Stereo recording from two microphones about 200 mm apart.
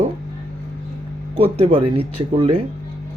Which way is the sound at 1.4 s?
30° right (ahead or behind).